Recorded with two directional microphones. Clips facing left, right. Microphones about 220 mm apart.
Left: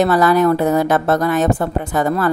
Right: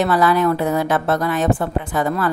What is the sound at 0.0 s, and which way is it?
A woman's voice, 40° left (ahead or behind).